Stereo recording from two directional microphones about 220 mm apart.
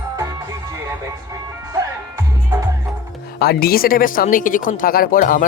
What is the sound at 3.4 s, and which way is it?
Speech, 45° left (ahead or behind).